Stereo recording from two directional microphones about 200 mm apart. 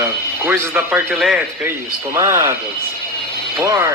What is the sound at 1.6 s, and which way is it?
A man's voice, 10° right (ahead or behind).